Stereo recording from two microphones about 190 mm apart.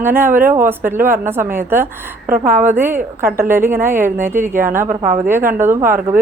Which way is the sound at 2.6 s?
10° right (ahead or behind).